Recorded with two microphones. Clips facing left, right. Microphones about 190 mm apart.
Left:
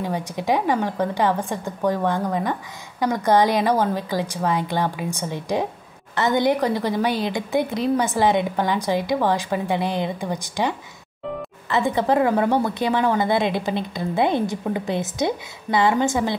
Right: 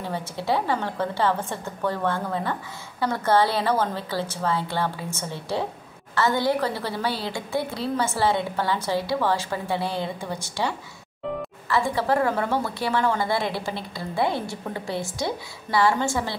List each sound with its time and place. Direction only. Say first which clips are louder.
0.0 s a woman's voice: left 4 dB; 15° left (ahead or behind)
11.7 s a woman's voice: left 3 dB; 20° left (ahead or behind)